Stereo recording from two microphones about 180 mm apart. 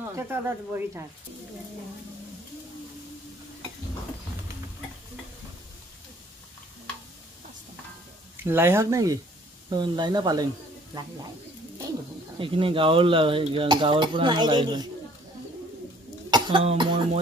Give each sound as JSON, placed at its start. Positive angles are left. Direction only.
{"t": 0.1, "sound": "speech", "side_deg": -15}
{"t": 8.5, "sound": "speech", "side_deg": -15}
{"t": 12.4, "sound": "speech", "side_deg": -30}
{"t": 16.3, "sound": "speech", "side_deg": -25}